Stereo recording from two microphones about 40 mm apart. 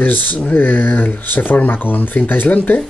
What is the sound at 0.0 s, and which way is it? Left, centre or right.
Speech, left.